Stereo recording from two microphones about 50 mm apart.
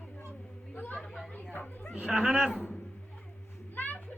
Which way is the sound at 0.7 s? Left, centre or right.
Left.